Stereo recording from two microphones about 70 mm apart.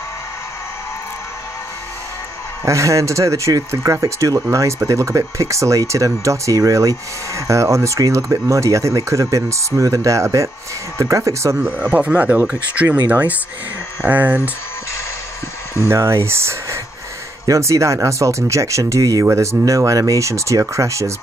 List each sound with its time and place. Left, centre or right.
2.6 s speech: right
11.9 s speech: centre
14.0 s speech: right
15.9 s speech: right
19.2 s speech: right